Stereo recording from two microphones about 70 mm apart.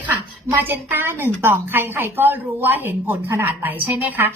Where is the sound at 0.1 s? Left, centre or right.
Right.